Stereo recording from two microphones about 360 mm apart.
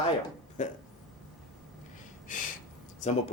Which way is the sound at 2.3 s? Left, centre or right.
Left.